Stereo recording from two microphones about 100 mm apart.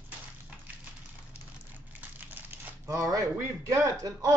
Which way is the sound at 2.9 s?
35° right (ahead or behind).